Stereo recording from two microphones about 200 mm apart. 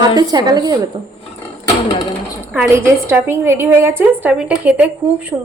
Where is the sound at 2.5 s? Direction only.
10° right (ahead or behind).